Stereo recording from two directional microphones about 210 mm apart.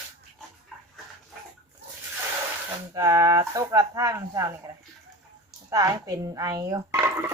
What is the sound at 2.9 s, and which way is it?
Speech, 15° right (ahead or behind).